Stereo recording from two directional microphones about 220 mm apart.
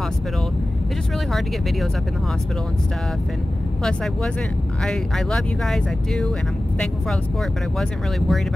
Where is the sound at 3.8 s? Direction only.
5° left (ahead or behind).